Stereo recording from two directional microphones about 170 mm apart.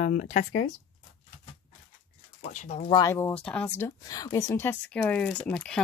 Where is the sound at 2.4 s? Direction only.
45° left (ahead or behind).